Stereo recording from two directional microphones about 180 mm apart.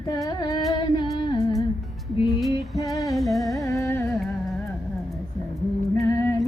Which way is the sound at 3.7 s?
15° left (ahead or behind).